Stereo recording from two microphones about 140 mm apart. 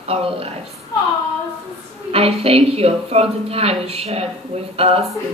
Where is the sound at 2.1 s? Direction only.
45° right (ahead or behind).